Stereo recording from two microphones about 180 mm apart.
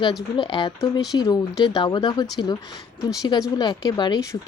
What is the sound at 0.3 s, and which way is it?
A woman's voice, 25° left (ahead or behind).